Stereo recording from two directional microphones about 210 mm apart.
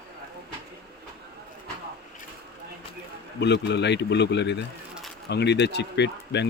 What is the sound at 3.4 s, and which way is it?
A man's voice, 55° left (ahead or behind).